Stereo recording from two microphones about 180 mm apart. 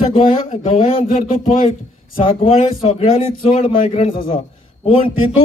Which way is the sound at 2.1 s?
30° left (ahead or behind).